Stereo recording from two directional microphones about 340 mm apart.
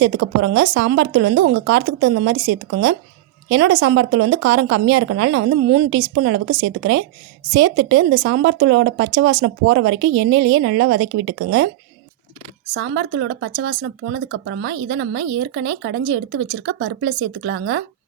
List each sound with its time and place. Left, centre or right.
0.0 s speech: right
12.7 s speech: right